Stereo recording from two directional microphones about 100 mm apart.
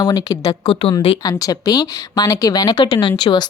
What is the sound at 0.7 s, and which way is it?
Speech, 60° left (ahead or behind).